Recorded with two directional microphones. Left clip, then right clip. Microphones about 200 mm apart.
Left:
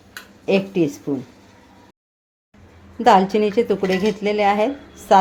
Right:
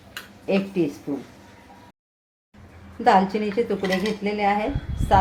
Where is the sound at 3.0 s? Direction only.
40° left (ahead or behind).